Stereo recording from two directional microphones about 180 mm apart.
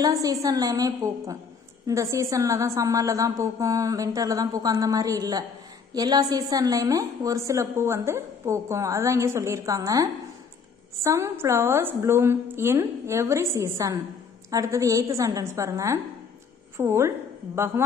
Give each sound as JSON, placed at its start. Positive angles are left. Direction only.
{"t": 0.0, "sound": "a woman's voice", "side_deg": -20}
{"t": 11.1, "sound": "a woman's voice", "side_deg": -15}